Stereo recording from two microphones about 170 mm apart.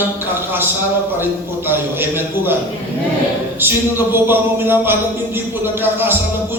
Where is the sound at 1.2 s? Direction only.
10° right (ahead or behind).